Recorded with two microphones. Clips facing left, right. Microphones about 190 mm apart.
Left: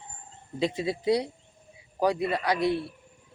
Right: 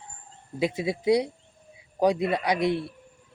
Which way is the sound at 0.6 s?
10° right (ahead or behind).